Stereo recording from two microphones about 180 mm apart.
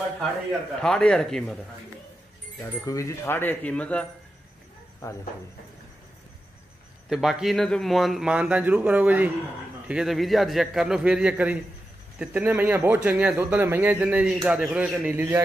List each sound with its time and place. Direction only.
0.5 s a man's voice: 5° left (ahead or behind)
2.6 s speech: 20° left (ahead or behind)
5.0 s speech: 20° left (ahead or behind)
7.1 s a man's voice: centre (ahead or behind)